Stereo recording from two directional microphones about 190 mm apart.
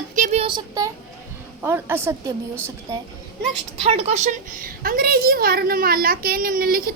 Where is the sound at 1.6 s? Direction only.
10° right (ahead or behind).